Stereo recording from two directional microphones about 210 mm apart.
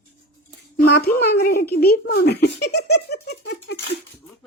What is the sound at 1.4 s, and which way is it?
Speech, 45° left (ahead or behind).